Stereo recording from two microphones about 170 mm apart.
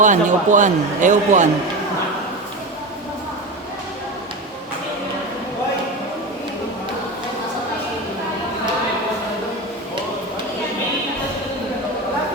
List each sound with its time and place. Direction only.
0.0 s a man's voice: 50° right (ahead or behind)